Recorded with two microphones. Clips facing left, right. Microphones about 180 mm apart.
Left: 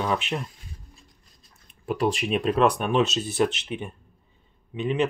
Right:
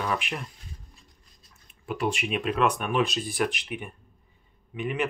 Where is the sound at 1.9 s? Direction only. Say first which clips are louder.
Left 4 dB; 35° left (ahead or behind).